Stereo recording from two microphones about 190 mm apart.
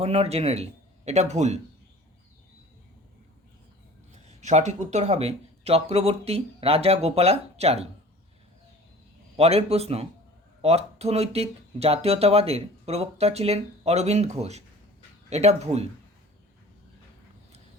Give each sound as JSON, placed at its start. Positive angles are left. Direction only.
{"t": 0.0, "sound": "speech", "side_deg": -30}
{"t": 4.1, "sound": "speech", "side_deg": -35}
{"t": 9.4, "sound": "speech", "side_deg": -30}